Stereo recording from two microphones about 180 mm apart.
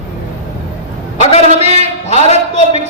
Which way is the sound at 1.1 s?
35° left (ahead or behind).